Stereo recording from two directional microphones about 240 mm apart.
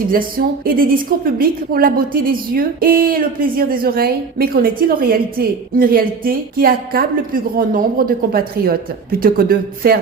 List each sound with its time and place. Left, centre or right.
0.1 s a woman's voice: right